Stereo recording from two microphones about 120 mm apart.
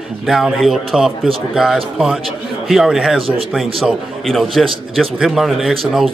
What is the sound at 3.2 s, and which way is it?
Speech, 50° right (ahead or behind).